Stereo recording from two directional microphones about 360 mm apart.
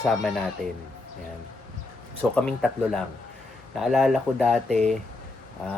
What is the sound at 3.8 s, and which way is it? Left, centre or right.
Speech, centre.